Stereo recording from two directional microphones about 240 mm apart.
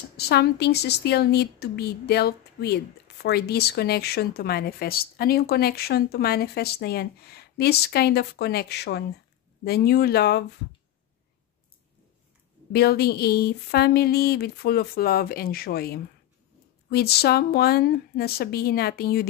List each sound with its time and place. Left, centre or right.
0.2 s speech: left
12.7 s speech: left